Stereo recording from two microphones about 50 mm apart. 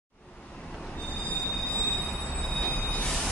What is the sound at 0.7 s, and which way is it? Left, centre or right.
Train, centre.